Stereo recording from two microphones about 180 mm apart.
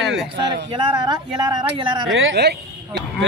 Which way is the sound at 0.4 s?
25° right (ahead or behind).